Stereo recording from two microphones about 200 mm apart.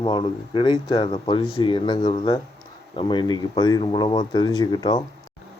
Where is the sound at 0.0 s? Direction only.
25° left (ahead or behind).